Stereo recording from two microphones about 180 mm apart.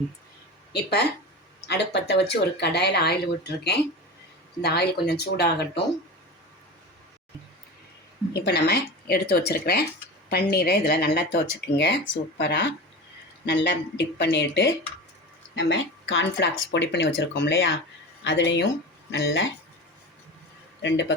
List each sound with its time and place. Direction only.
0.7 s speech: 65° left (ahead or behind)
8.4 s speech: 60° left (ahead or behind)
12.4 s speech: 80° left
15.5 s speech: 90° left
19.1 s speech: 90° left
20.8 s speech: 85° left